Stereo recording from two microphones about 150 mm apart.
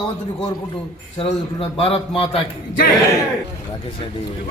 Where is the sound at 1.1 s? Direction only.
40° left (ahead or behind).